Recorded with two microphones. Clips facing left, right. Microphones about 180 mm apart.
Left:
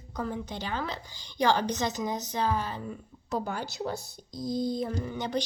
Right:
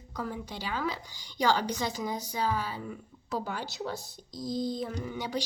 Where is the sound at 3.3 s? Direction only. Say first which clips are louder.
Left 2 dB; 45° left (ahead or behind).